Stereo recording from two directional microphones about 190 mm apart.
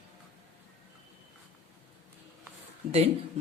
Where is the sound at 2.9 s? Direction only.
30° right (ahead or behind).